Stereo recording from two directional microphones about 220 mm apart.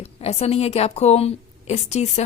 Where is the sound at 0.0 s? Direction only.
30° left (ahead or behind).